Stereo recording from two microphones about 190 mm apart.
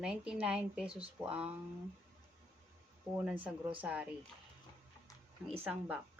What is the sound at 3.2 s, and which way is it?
Speech, 5° right (ahead or behind).